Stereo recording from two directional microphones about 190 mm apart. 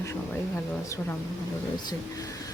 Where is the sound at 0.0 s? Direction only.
15° left (ahead or behind).